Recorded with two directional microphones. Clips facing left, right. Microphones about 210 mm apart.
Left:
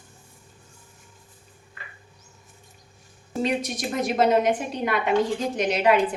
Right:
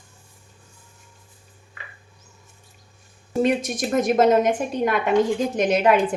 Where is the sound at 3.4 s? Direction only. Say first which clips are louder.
Right 4 dB; 50° right (ahead or behind).